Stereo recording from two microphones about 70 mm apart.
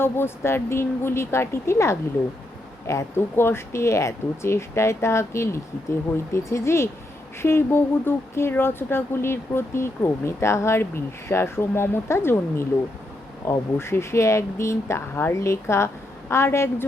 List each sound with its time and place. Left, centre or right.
0.0 s speech: left